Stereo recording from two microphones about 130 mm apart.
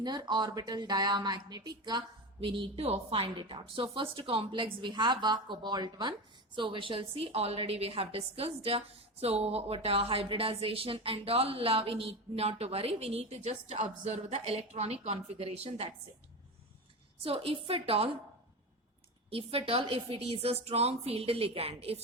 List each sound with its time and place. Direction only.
0.0 s a woman's voice: 35° right (ahead or behind); by 15.9 s 50° right (ahead or behind)
17.2 s a woman's voice: 45° right (ahead or behind)
19.3 s a woman's voice: 45° right (ahead or behind)